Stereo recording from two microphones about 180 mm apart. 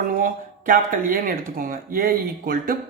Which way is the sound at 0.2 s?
50° right (ahead or behind).